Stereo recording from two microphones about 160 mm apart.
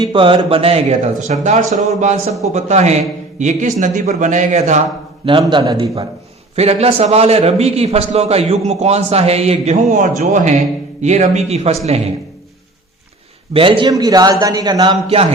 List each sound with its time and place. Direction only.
0.0 s a man's voice: 30° right (ahead or behind); by 4.8 s 45° right (ahead or behind)
5.5 s a man's voice: 30° right (ahead or behind)
13.5 s a man's voice: 35° right (ahead or behind)
15.0 s a man's voice: 40° right (ahead or behind)